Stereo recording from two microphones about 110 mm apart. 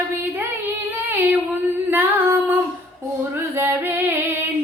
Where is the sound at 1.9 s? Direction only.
20° right (ahead or behind).